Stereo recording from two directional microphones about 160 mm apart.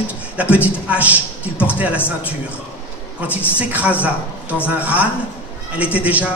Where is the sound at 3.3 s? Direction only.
10° right (ahead or behind).